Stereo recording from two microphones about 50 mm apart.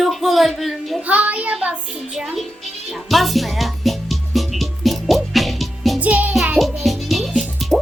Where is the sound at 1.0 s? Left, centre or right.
Right.